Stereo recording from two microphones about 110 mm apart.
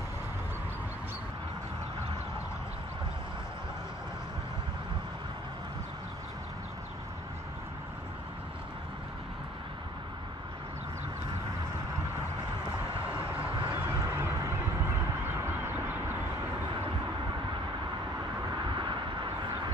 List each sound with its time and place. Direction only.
13.7 s honk: 25° right (ahead or behind)
15.2 s duck: 20° right (ahead or behind)
18.8 s vehicle: 45° right (ahead or behind)